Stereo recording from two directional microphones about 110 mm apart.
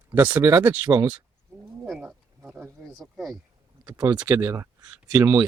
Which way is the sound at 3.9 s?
40° right (ahead or behind).